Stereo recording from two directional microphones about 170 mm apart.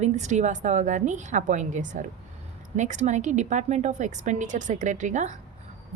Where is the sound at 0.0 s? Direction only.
45° right (ahead or behind).